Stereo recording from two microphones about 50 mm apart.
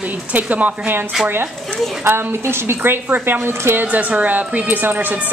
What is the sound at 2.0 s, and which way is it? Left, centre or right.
A woman's voice, right.